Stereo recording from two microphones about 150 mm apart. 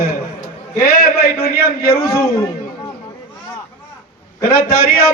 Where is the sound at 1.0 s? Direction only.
90° left.